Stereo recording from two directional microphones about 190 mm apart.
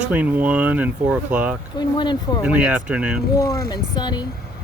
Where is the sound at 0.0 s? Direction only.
10° right (ahead or behind).